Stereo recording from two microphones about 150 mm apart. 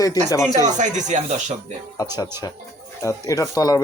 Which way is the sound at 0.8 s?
55° right (ahead or behind).